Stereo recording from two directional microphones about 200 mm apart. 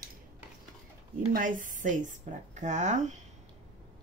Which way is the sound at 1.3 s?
40° right (ahead or behind).